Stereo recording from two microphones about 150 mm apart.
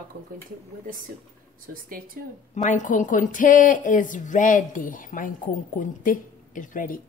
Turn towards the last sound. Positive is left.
turn(degrees=65)  # may be behind; listen again after turning